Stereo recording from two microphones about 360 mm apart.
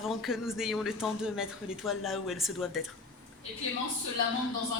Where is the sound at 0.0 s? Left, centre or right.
Centre.